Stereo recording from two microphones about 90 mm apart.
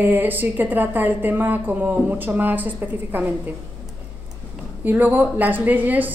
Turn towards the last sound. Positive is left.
turn(degrees=-20)  # may be behind; listen again after turning